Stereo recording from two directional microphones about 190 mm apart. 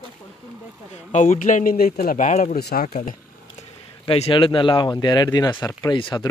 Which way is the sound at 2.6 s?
55° left (ahead or behind).